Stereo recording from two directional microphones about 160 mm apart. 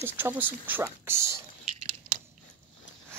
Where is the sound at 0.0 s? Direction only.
15° right (ahead or behind).